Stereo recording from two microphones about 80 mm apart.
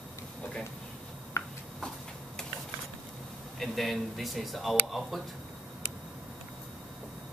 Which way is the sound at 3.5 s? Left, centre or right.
Centre.